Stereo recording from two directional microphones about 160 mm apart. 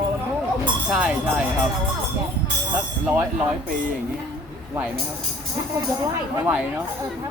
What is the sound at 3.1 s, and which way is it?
Speech, 10° right (ahead or behind).